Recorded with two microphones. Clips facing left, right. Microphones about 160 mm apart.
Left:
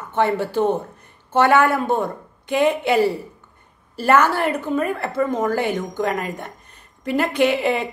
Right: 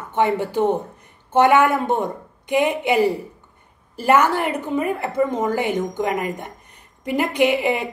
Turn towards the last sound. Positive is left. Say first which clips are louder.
# even
turn(degrees=-15)  # may be behind; listen again after turning